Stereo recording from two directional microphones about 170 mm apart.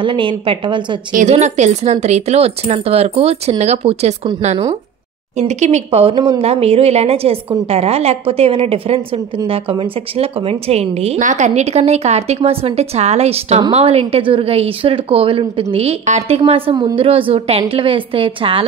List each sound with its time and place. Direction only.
0.0 s a woman's voice: 30° right (ahead or behind)
1.1 s a woman's voice: 45° right (ahead or behind)
5.4 s a woman's voice: 40° right (ahead or behind)